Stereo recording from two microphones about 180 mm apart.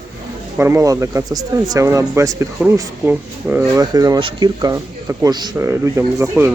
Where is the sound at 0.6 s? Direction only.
15° right (ahead or behind).